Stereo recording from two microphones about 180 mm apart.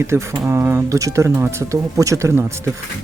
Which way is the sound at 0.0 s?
15° right (ahead or behind).